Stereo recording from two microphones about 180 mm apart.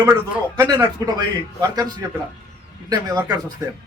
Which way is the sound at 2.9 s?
20° right (ahead or behind).